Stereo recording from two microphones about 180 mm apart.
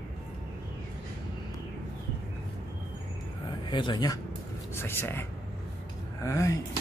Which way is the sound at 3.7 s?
25° left (ahead or behind).